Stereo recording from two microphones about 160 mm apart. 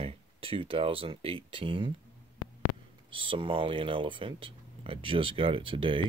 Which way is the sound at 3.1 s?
35° right (ahead or behind).